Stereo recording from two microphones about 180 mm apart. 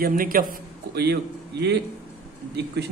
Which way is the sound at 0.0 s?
50° right (ahead or behind).